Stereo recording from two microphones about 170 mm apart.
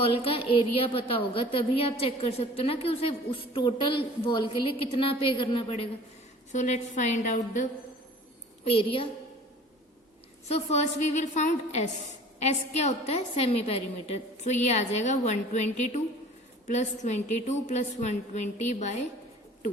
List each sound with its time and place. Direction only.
0.0 s a woman's voice: 35° left (ahead or behind)
6.5 s a woman's voice: 45° left (ahead or behind)
8.6 s a woman's voice: 35° left (ahead or behind)
10.5 s a woman's voice: 40° left (ahead or behind)